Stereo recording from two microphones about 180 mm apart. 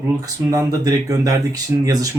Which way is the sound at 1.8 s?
20° right (ahead or behind).